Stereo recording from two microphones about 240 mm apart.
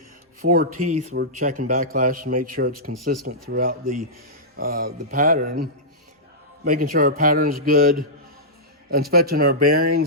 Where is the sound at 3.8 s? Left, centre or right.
Right.